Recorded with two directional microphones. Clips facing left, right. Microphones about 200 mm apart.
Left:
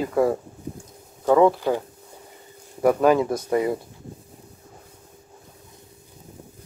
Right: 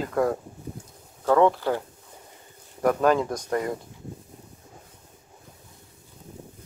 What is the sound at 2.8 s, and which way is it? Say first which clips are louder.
Speech: left 3 dB; 10° left (ahead or behind).